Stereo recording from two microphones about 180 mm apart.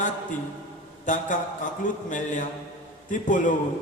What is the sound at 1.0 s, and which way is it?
Speech, 45° left (ahead or behind).